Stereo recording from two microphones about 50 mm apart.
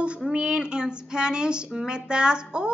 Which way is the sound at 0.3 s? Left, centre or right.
Right.